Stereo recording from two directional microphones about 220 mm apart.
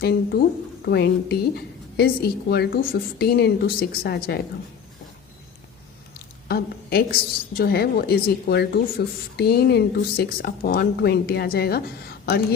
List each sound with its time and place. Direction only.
0.0 s a woman's voice: 45° left (ahead or behind)
6.5 s a woman's voice: 45° left (ahead or behind)